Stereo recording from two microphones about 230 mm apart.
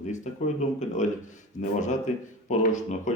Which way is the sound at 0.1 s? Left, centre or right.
Left.